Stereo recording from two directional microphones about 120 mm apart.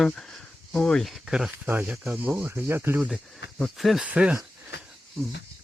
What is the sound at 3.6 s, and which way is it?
Speech, centre (ahead or behind).